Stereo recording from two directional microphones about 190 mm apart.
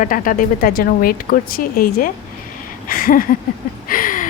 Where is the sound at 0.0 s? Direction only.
45° left (ahead or behind).